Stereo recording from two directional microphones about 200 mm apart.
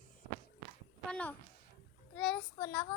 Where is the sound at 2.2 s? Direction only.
5° left (ahead or behind).